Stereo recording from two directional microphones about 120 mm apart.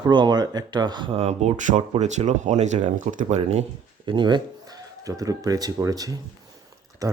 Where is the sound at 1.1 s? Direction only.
60° right (ahead or behind); by 1.8 s 85° right.